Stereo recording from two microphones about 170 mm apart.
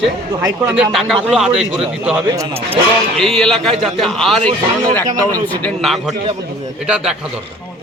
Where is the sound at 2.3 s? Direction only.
20° right (ahead or behind).